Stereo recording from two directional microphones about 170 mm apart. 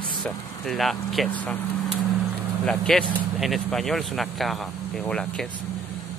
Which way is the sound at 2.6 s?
5° left (ahead or behind).